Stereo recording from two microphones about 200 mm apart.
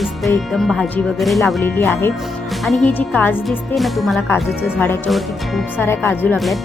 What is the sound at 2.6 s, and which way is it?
Speech, centre (ahead or behind).